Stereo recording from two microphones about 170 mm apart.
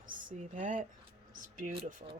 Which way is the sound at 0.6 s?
50° right (ahead or behind).